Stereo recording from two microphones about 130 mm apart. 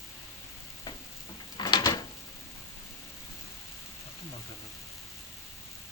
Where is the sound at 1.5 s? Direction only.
30° left (ahead or behind).